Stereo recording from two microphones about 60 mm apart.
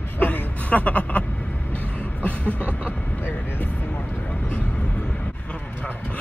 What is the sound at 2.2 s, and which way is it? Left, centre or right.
Speech, left.